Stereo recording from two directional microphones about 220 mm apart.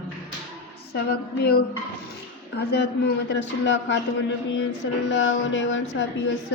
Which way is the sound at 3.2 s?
55° left (ahead or behind).